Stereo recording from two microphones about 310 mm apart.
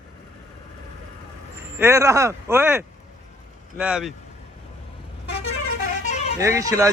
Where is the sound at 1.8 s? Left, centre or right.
Centre.